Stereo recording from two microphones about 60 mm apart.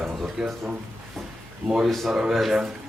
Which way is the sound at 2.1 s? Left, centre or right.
Centre.